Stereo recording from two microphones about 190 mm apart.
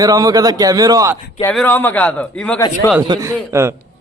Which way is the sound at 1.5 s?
10° left (ahead or behind).